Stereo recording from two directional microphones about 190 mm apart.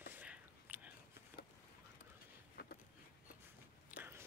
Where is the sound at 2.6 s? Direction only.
55° left (ahead or behind).